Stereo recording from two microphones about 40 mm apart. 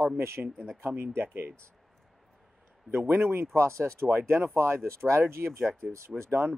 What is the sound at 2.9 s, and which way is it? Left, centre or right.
Speech, right.